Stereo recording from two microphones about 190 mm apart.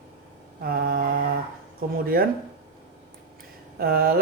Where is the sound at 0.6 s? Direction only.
55° right (ahead or behind).